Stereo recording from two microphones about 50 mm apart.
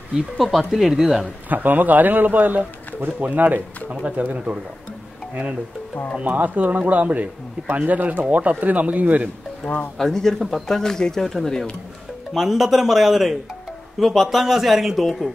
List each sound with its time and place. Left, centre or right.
0.4 s speech: centre
1.5 s a man's voice: right
6.2 s a man's voice: right
9.9 s speech: centre
12.4 s speech: centre